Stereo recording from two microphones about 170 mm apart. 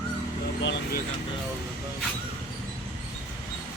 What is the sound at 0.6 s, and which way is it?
Speech, 80° left.